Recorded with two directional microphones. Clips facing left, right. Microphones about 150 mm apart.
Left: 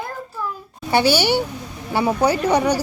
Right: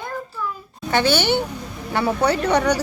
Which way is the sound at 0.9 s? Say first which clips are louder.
Left 2 dB; 10° left (ahead or behind).